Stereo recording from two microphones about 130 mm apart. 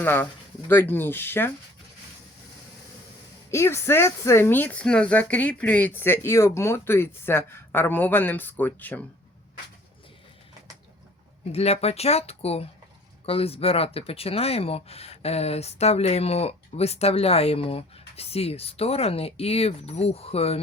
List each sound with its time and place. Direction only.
0.0 s speech: 15° left (ahead or behind)
3.5 s speech: 20° left (ahead or behind)
11.5 s speech: 55° left (ahead or behind)